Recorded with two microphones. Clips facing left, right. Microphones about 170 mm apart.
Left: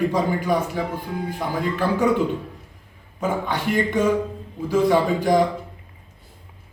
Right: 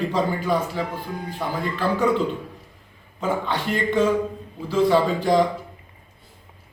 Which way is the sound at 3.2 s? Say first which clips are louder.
Left 1 dB; 15° left (ahead or behind).